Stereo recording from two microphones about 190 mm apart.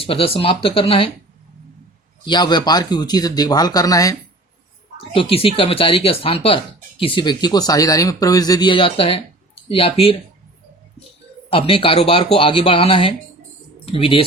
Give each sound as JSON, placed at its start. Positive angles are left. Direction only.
{"t": 0.0, "sound": "speech", "side_deg": 30}
{"t": 2.2, "sound": "speech", "side_deg": 25}
{"t": 4.9, "sound": "speech", "side_deg": 30}
{"t": 11.5, "sound": "speech", "side_deg": 30}